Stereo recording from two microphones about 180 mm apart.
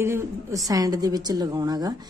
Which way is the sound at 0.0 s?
15° right (ahead or behind).